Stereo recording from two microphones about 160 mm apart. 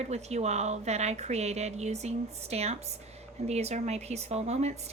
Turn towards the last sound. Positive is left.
turn(degrees=-45)  # may be behind; listen again after turning